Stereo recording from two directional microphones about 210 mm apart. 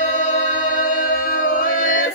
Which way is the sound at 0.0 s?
35° left (ahead or behind).